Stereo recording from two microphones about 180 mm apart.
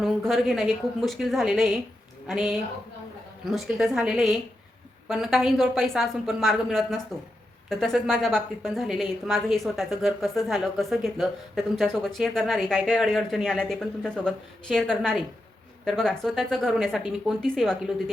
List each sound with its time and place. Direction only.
0.0 s a woman's voice: centre (ahead or behind)